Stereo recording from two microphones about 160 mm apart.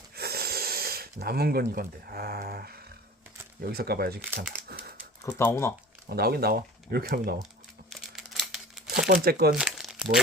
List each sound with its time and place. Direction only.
0.2 s speech: 75° right (ahead or behind)
5.2 s speech: 15° left (ahead or behind)
6.1 s speech: 75° right (ahead or behind)
7.9 s a sound: centre (ahead or behind)
9.0 s speech: 75° right (ahead or behind)
9.6 s crumpling: 5° right (ahead or behind)